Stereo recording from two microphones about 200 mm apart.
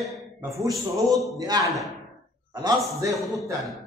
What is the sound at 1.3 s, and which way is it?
Speech, 20° right (ahead or behind).